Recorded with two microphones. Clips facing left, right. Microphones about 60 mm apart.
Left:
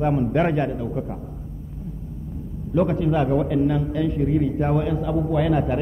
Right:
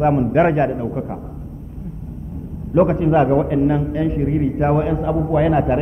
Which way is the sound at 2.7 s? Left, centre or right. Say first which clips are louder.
Right 6 dB; right.